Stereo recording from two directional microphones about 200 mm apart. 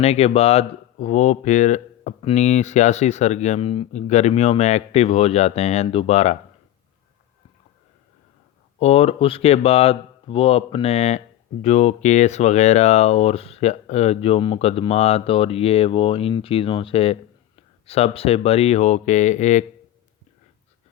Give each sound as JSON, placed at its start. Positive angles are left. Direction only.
{"t": 0.0, "sound": "speech", "side_deg": 30}
{"t": 8.8, "sound": "speech", "side_deg": 30}